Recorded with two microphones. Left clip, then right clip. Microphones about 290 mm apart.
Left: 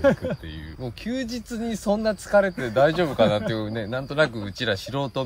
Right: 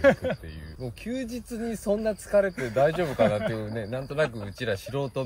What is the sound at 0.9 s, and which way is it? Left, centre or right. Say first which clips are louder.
Speech: left 4 dB; centre.